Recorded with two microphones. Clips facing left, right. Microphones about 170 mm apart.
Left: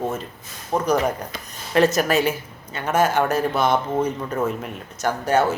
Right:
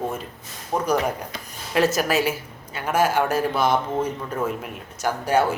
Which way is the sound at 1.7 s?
5° right (ahead or behind).